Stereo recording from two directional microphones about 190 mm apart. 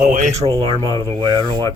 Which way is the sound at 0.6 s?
25° right (ahead or behind).